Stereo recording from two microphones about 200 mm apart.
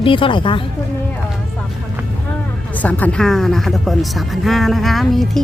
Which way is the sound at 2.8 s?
5° left (ahead or behind).